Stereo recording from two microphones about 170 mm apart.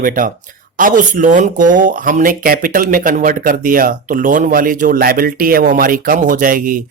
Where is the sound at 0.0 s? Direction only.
55° right (ahead or behind).